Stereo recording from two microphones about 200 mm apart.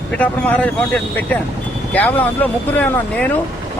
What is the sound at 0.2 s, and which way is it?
Speech, 5° left (ahead or behind).